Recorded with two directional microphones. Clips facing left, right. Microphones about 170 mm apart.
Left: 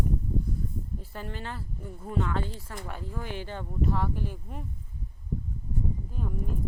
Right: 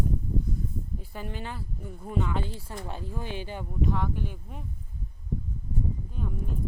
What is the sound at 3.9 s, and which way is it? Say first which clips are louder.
Speech: even; centre (ahead or behind).